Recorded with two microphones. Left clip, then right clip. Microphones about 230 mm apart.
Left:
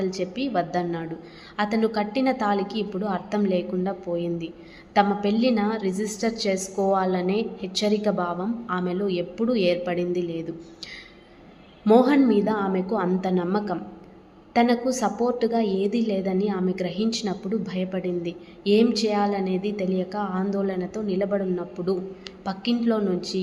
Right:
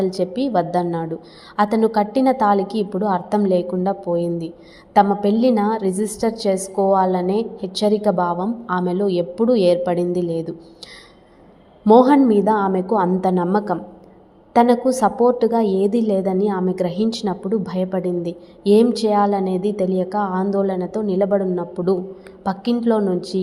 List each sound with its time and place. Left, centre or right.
0.0 s a woman's voice: centre
11.9 s a woman's voice: centre